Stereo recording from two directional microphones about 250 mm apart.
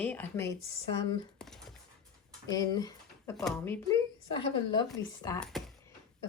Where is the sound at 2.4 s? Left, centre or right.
Centre.